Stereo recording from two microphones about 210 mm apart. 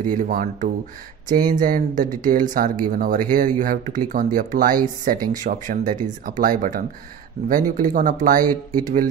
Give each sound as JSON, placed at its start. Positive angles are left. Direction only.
{"t": 0.0, "sound": "speech", "side_deg": -40}
{"t": 8.5, "sound": "speech", "side_deg": -20}